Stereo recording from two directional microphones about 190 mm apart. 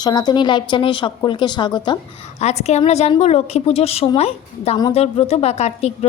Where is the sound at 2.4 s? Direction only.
35° left (ahead or behind).